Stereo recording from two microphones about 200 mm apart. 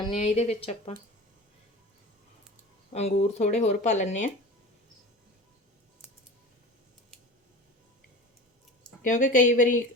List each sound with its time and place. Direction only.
0.2 s speech: 30° left (ahead or behind)
2.9 s speech: 30° left (ahead or behind)
9.0 s speech: 40° left (ahead or behind)